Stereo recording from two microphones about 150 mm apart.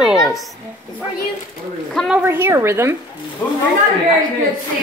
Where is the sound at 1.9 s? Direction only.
5° left (ahead or behind).